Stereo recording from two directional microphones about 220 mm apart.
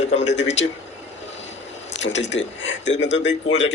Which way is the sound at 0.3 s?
55° left (ahead or behind).